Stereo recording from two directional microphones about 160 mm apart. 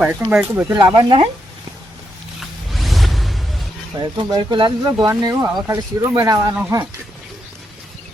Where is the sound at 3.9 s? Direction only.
30° right (ahead or behind).